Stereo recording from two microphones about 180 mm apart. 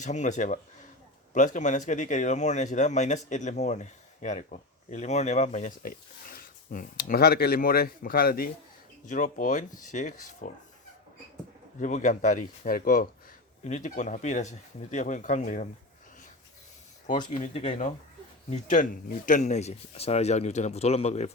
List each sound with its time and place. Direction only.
0.0 s speech: 40° left (ahead or behind); by 8.4 s 55° left (ahead or behind)
9.0 s speech: 45° left (ahead or behind)
11.8 s speech: 45° left (ahead or behind)
17.3 s speech: 40° left (ahead or behind)